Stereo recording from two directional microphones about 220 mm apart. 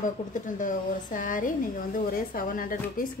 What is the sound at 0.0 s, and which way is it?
Speech, 35° left (ahead or behind).